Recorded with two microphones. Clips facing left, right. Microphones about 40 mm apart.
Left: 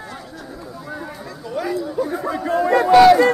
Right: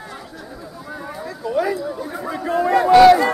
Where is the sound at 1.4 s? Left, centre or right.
Centre.